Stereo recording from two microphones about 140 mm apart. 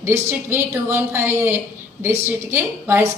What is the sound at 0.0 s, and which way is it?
A woman's voice, 15° right (ahead or behind).